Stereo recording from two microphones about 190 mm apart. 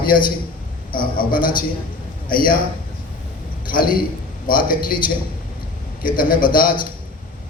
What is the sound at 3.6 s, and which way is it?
A man's voice, 50° left (ahead or behind).